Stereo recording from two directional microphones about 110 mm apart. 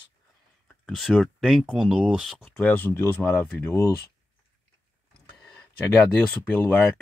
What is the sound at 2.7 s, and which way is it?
Speech, 20° left (ahead or behind).